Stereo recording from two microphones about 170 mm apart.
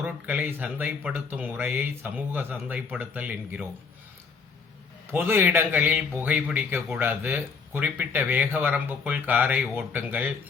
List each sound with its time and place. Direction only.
0.0 s speech: 10° right (ahead or behind)
5.1 s speech: 15° right (ahead or behind)